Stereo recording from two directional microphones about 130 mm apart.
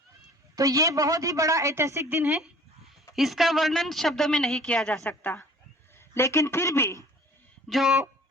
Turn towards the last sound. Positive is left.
turn(degrees=0)  # may be behind; listen again after turning